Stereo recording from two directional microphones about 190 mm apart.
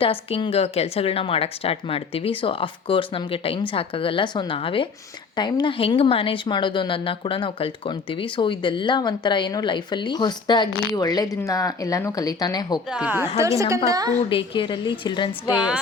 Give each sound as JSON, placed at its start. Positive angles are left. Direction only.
{"t": 0.0, "sound": "speech", "side_deg": 30}
{"t": 12.9, "sound": "a woman's voice", "side_deg": -5}
{"t": 14.2, "sound": "speech", "side_deg": 25}
{"t": 15.5, "sound": "speech", "side_deg": -5}